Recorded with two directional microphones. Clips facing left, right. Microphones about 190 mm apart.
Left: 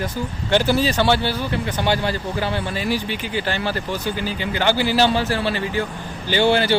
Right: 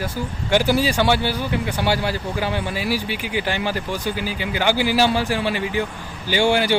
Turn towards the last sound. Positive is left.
turn(degrees=-10)  # may be behind; listen again after turning